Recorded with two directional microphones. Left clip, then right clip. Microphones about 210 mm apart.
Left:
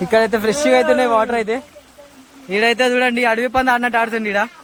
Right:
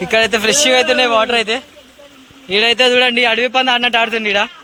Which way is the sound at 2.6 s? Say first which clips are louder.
Right 3 dB; 15° left (ahead or behind).